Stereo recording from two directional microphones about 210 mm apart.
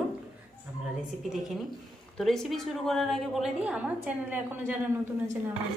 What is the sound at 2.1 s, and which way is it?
A woman's voice, centre (ahead or behind).